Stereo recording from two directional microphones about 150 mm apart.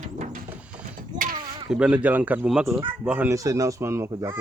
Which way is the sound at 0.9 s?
65° right (ahead or behind).